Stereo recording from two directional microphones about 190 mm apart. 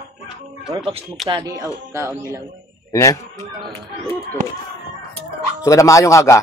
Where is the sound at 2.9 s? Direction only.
15° left (ahead or behind).